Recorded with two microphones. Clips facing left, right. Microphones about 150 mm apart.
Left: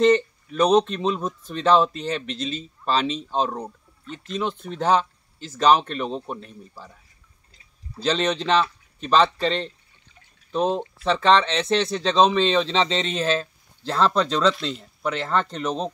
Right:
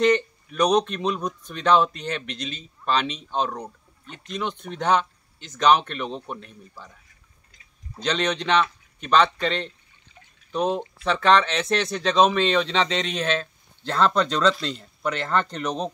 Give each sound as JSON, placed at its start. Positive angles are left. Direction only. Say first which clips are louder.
{"t": 0.6, "sound": "speech", "louder": "left 2 dB", "side_deg": 25}
{"t": 4.3, "sound": "speech", "louder": "left 2 dB", "side_deg": 30}
{"t": 6.0, "sound": "speech", "louder": "left 3 dB", "side_deg": 5}
{"t": 7.5, "sound": "speech", "louder": "left 2 dB", "side_deg": 30}
{"t": 13.8, "sound": "speech", "louder": "even", "side_deg": 5}